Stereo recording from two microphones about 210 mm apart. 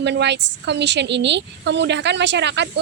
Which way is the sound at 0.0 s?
55° right (ahead or behind).